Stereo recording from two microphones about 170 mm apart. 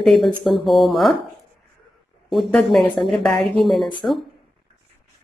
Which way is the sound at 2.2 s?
Centre (ahead or behind).